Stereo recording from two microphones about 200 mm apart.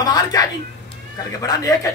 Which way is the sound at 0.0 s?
20° left (ahead or behind).